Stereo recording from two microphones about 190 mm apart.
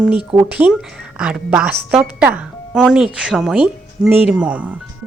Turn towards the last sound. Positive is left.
turn(degrees=-5)  # may be behind; listen again after turning